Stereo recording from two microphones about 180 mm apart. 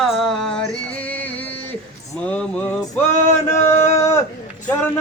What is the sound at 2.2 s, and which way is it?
Male singing, 5° left (ahead or behind).